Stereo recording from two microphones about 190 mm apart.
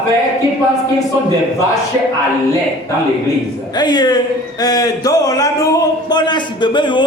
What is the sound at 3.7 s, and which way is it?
A man's voice, 20° left (ahead or behind).